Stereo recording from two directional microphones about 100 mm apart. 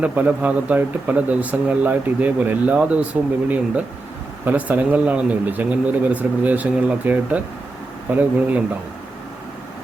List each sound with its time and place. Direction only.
0.0 s speech: 15° right (ahead or behind)